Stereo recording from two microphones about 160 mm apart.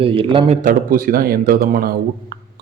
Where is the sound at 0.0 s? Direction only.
35° right (ahead or behind).